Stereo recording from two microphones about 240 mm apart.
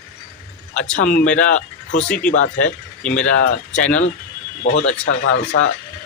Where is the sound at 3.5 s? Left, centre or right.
Left.